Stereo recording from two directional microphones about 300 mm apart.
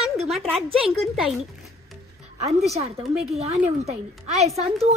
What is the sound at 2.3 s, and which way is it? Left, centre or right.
A woman's voice, right.